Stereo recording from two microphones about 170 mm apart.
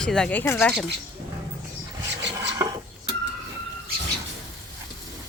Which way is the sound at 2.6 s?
20° right (ahead or behind).